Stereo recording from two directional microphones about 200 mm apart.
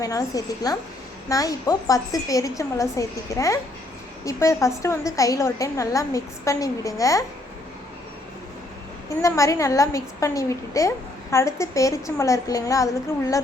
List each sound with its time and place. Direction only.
0.0 s a woman's voice: 15° left (ahead or behind)
9.0 s a woman's voice: 15° left (ahead or behind)